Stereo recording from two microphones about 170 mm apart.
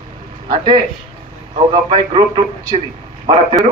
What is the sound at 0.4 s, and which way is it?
A man's voice, 30° right (ahead or behind).